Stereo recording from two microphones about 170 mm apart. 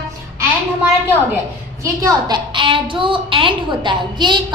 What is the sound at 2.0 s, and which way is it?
Speech, 25° right (ahead or behind).